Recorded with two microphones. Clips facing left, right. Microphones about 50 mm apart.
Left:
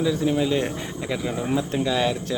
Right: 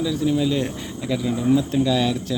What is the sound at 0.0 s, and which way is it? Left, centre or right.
Speech, left.